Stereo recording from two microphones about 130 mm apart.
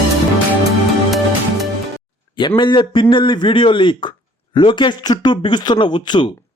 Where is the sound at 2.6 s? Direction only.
35° left (ahead or behind).